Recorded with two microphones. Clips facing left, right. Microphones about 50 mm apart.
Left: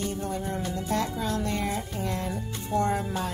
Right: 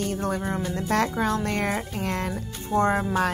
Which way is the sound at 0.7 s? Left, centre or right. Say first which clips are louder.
Right 6 dB; right.